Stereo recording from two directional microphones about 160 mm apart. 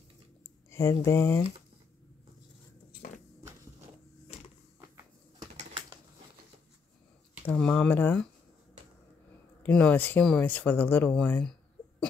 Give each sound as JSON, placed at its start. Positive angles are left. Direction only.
{"t": 0.7, "sound": "speech", "side_deg": 20}
{"t": 4.7, "sound": "walk", "side_deg": -15}
{"t": 7.4, "sound": "speech", "side_deg": 5}
{"t": 9.6, "sound": "speech", "side_deg": 5}